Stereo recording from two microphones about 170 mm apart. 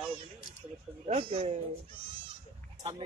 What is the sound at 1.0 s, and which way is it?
Speech, 40° right (ahead or behind).